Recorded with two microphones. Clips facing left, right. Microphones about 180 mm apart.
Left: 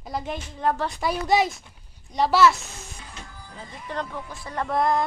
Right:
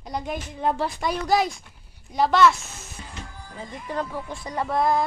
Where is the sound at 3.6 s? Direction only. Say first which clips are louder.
Right 3 dB; 10° right (ahead or behind).